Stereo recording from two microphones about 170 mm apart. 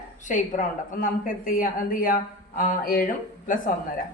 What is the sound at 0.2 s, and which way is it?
Speech, 45° left (ahead or behind).